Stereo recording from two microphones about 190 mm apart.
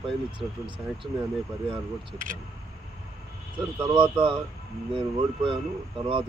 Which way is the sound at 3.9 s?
25° right (ahead or behind).